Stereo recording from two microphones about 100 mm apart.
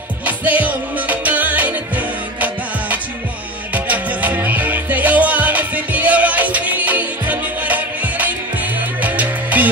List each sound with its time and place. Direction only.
0.2 s music: 15° right (ahead or behind)
3.7 s music: 15° right (ahead or behind)